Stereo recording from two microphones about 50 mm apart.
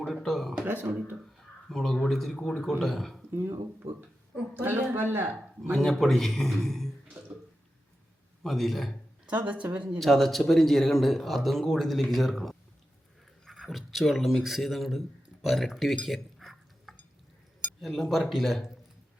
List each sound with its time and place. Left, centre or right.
0.0 s speech: centre
0.6 s speech: right
1.7 s speech: centre
4.5 s a man's voice: right
5.7 s speech: centre
8.4 s speech: centre
9.2 s speech: right
10.0 s speech: centre
16.0 s dishes: centre
17.7 s speech: centre